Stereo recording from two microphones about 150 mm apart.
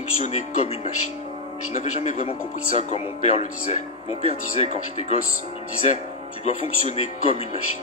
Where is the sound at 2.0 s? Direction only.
50° left (ahead or behind).